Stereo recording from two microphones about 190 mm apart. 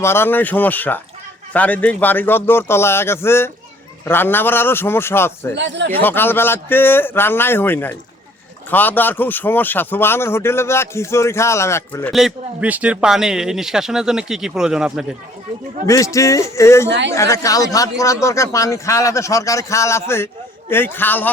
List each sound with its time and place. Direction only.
0.0 s a man's voice: 10° left (ahead or behind)
5.5 s speech: 70° right (ahead or behind)
5.9 s a man's voice: 10° left (ahead or behind)
12.1 s speech: 5° right (ahead or behind)
16.1 s a man's voice: 15° left (ahead or behind)
16.9 s speech: 70° right (ahead or behind)
17.2 s a man's voice: 15° left (ahead or behind)